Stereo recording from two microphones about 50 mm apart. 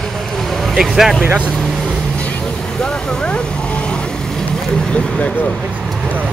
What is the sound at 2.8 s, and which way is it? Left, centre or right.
Vehicle, centre.